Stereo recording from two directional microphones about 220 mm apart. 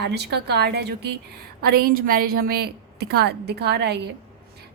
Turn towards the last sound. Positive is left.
turn(degrees=-50)  # may be behind; listen again after turning